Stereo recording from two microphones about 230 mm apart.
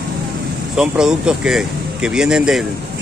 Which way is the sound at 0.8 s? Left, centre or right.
Centre.